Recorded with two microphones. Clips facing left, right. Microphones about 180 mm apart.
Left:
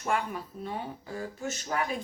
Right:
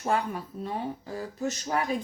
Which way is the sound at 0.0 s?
35° right (ahead or behind).